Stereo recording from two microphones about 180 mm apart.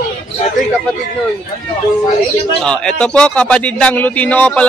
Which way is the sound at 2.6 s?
5° left (ahead or behind).